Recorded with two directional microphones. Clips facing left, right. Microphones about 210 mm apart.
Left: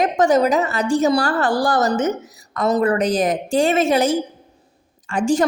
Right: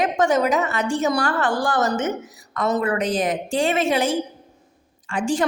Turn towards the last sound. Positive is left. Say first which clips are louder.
# left 4 dB
turn(degrees=40)  # may be behind; listen again after turning